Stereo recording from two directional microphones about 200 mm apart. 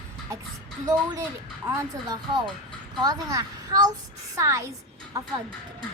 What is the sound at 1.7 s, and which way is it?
A woman's voice, 20° right (ahead or behind).